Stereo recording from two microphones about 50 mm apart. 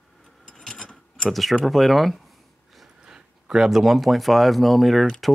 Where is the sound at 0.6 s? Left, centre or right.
Centre.